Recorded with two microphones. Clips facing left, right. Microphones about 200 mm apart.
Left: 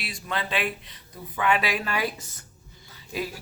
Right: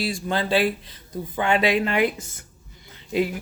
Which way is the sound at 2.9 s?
20° right (ahead or behind).